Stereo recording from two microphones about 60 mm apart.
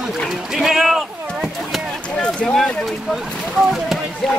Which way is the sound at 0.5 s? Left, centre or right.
Centre.